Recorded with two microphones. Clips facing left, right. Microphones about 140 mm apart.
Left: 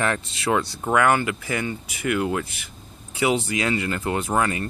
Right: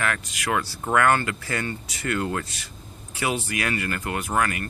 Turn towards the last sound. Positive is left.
turn(degrees=25)  # may be behind; listen again after turning